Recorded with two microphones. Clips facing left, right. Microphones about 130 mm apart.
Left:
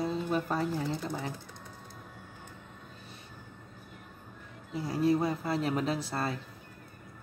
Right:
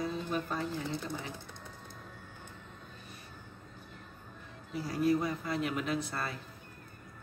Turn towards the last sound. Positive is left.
turn(degrees=30)  # may be behind; listen again after turning